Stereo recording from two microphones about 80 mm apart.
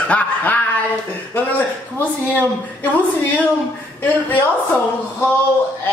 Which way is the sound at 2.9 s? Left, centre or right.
Left.